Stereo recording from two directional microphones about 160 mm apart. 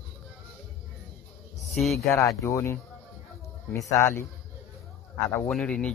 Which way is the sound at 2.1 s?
20° left (ahead or behind).